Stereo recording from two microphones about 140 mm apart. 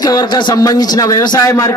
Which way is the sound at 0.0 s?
30° left (ahead or behind).